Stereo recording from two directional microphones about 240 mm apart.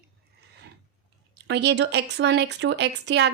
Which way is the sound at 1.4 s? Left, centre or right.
Right.